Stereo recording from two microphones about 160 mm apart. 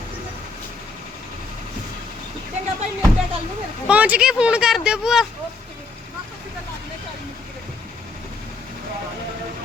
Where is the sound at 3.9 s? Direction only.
10° right (ahead or behind).